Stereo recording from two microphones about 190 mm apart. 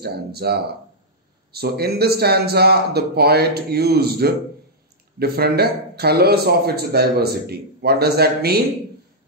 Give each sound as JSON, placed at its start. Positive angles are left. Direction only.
{"t": 0.0, "sound": "a man's voice", "side_deg": -55}